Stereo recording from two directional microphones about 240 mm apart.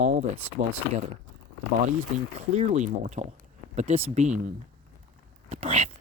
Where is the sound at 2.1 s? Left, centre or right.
Right.